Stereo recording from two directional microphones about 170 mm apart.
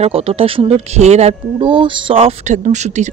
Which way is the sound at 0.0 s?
35° right (ahead or behind).